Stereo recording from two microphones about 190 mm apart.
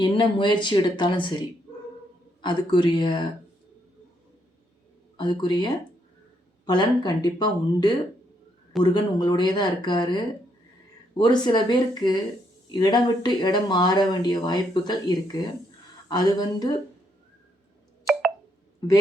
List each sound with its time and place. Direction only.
0.0 s speech: 25° left (ahead or behind)
5.1 s speech: 25° left (ahead or behind)
18.0 s telephone dialing: centre (ahead or behind)